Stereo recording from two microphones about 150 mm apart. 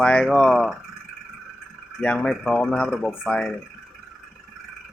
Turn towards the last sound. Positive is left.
turn(degrees=5)  # may be behind; listen again after turning